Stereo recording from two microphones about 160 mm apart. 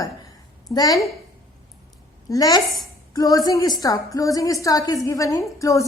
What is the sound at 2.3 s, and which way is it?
A woman's voice, 25° left (ahead or behind).